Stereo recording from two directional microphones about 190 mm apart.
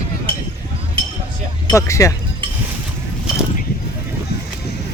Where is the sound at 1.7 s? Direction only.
15° left (ahead or behind).